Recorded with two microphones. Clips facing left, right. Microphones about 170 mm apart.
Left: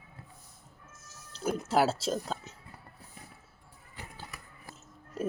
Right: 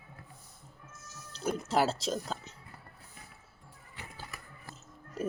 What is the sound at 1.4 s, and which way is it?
Speech, 5° left (ahead or behind).